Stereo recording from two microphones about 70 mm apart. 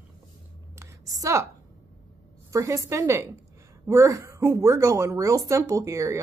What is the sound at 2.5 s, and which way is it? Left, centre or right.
Speech, right.